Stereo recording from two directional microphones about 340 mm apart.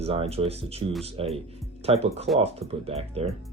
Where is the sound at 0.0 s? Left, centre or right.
Centre.